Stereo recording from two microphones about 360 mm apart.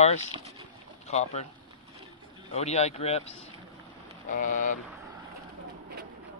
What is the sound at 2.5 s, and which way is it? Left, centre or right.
Speech, centre.